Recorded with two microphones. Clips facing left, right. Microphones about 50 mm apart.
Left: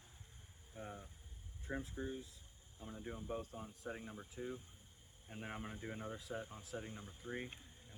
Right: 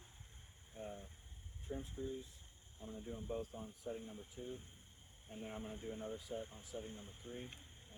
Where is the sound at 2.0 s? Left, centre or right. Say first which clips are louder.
Even; left.